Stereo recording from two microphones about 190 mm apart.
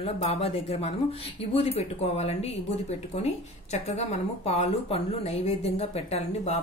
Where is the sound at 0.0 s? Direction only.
30° left (ahead or behind).